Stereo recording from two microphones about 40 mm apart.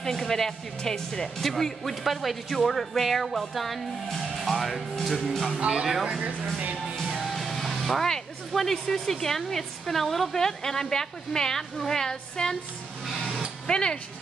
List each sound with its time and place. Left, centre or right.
0.0 s a woman's voice: centre
5.3 s a woman's voice: centre
7.2 s music: centre
8.1 s a woman's voice: centre
13.7 s speech: left